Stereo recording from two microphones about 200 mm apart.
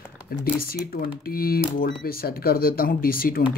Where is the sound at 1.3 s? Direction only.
50° left (ahead or behind).